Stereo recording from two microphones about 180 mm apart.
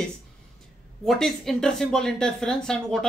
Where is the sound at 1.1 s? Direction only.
Centre (ahead or behind).